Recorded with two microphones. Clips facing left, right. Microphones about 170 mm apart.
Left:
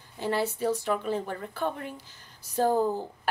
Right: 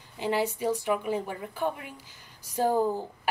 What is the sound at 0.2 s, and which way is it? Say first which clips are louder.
A woman's voice: even; 15° right (ahead or behind).